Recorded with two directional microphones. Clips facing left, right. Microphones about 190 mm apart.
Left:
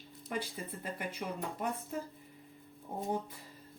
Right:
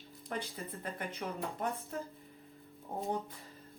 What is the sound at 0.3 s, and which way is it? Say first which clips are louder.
Speech: left 1 dB; 5° left (ahead or behind).